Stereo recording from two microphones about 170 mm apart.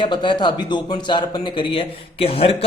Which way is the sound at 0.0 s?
30° left (ahead or behind).